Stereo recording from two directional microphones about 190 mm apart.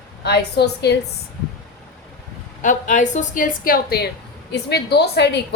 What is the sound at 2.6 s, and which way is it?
A woman's voice, 40° left (ahead or behind).